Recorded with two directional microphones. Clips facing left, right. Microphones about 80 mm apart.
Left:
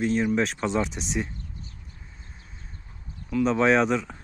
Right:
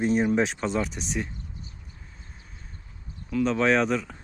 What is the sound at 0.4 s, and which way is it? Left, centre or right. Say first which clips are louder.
Speech: left 1 dB; centre.